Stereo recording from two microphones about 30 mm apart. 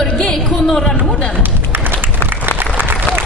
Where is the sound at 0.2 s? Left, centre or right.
Left.